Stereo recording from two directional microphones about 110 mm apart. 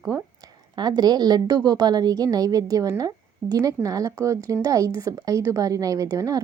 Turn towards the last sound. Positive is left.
turn(degrees=-30)  # may be behind; listen again after turning